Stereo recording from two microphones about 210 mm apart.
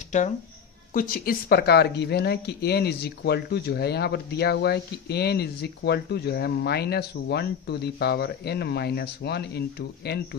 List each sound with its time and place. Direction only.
0.9 s speech: 45° left (ahead or behind)